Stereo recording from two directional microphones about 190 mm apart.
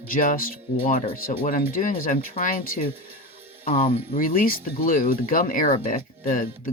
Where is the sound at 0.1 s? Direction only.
45° left (ahead or behind).